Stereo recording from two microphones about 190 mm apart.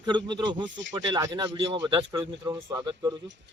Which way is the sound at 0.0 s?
25° right (ahead or behind).